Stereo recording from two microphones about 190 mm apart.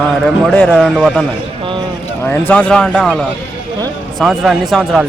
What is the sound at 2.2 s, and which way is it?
Speech, 10° left (ahead or behind).